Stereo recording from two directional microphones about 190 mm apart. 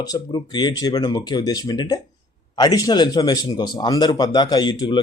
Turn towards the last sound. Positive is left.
turn(degrees=20)  # may be behind; listen again after turning